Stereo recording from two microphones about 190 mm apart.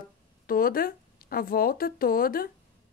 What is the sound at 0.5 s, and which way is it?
A woman's voice, 50° left (ahead or behind).